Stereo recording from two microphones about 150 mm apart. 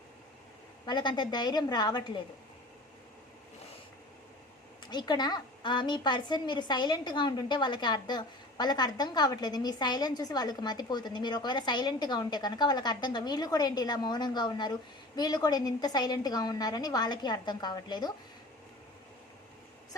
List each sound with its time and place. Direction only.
0.9 s a woman's voice: 30° left (ahead or behind)
4.9 s a woman's voice: 30° left (ahead or behind)